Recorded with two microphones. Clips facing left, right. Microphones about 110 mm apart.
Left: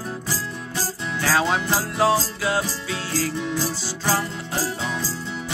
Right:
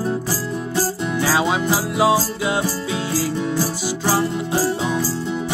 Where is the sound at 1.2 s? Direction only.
10° right (ahead or behind).